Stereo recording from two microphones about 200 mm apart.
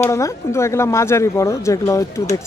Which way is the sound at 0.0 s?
15° left (ahead or behind).